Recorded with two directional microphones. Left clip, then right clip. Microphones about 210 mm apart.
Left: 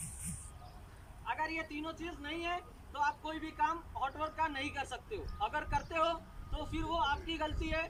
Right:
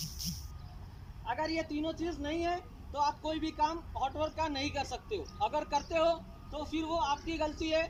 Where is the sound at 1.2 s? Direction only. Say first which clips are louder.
Right 3 dB; 25° right (ahead or behind).